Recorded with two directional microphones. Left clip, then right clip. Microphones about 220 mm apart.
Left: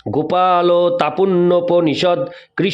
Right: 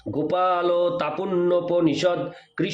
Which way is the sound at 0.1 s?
45° left (ahead or behind).